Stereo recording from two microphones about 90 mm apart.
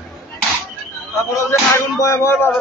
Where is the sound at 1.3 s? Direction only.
35° left (ahead or behind).